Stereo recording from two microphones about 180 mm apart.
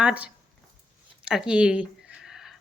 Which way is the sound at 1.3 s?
5° right (ahead or behind).